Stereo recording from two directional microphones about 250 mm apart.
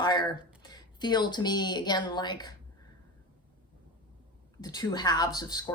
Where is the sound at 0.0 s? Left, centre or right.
Centre.